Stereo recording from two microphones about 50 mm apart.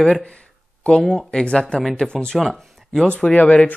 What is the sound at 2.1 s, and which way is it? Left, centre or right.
Speech, centre.